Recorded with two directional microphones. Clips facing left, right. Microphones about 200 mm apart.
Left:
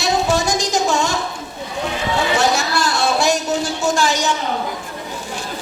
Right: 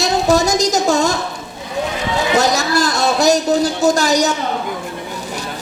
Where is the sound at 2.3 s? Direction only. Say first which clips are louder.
Right 5 dB; 40° right (ahead or behind).